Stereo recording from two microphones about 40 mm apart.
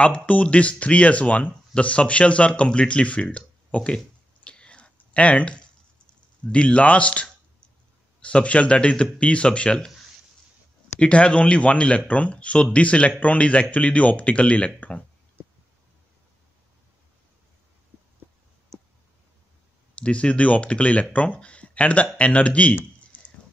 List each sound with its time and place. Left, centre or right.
0.0 s speech: left
4.5 s a sound: left
6.5 s speech: left
11.0 s speech: left
20.0 s speech: left